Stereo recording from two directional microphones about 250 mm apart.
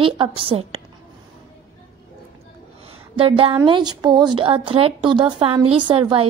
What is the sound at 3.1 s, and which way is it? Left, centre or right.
A woman's voice, right.